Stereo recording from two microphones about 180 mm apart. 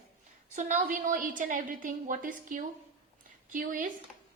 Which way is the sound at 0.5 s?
40° right (ahead or behind).